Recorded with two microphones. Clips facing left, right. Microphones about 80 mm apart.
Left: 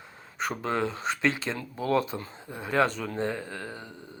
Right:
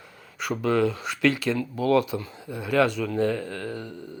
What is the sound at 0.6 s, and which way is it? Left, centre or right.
Speech, left.